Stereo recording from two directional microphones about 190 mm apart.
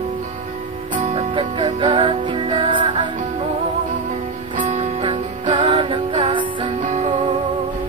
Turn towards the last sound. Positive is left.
turn(degrees=-40)  # may be behind; listen again after turning